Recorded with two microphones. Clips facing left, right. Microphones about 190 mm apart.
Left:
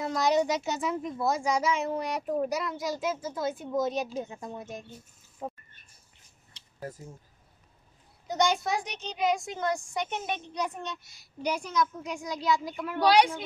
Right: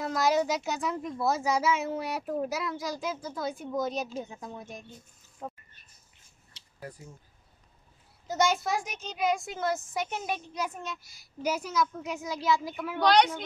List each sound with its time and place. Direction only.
0.0 s a child's voice: centre (ahead or behind)
5.4 s a sound: 10° left (ahead or behind)
6.8 s speech: 45° left (ahead or behind)
8.3 s a child's voice: 5° right (ahead or behind)
13.0 s a woman's voice: 10° left (ahead or behind)